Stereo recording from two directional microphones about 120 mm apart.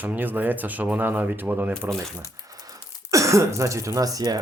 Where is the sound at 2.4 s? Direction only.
30° right (ahead or behind).